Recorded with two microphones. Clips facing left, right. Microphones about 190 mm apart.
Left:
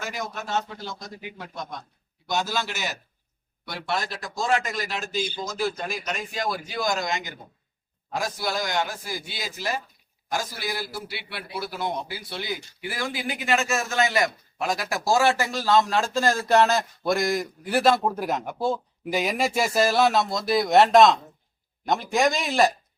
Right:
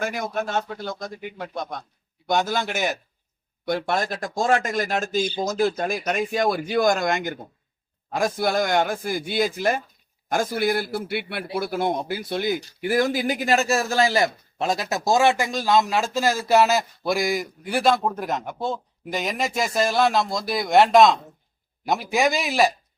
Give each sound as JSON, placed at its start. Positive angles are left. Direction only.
{"t": 0.0, "sound": "a man's voice", "side_deg": -55}